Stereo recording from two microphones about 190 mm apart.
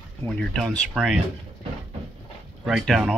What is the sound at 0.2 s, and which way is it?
Speech, 5° left (ahead or behind).